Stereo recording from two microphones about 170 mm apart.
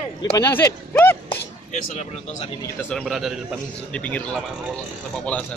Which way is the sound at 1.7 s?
40° left (ahead or behind).